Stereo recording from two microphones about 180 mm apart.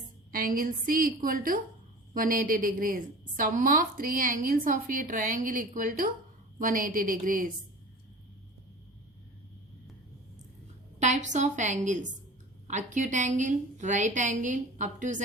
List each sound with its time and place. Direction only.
0.3 s a woman's voice: 50° right (ahead or behind)
11.0 s a woman's voice: 40° right (ahead or behind)